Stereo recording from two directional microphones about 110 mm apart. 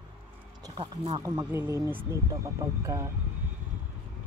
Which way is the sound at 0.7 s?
40° right (ahead or behind).